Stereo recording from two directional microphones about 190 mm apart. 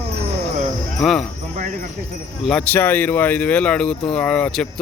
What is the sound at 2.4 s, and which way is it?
Speech, 5° left (ahead or behind).